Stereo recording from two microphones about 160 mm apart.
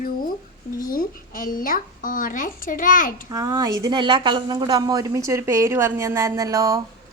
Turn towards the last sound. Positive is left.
turn(degrees=-20)  # may be behind; listen again after turning